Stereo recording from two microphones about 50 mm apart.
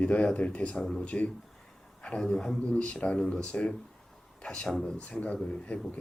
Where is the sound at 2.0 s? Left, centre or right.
Centre.